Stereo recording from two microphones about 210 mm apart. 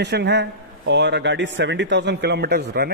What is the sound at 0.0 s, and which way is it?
A man's voice, 55° right (ahead or behind).